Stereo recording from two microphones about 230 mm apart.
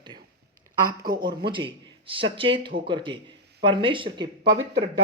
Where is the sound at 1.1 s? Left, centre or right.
Centre.